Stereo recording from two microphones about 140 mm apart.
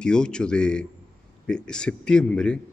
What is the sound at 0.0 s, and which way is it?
A man's voice, 5° left (ahead or behind).